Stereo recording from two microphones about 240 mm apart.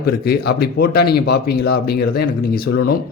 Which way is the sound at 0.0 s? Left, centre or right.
Left.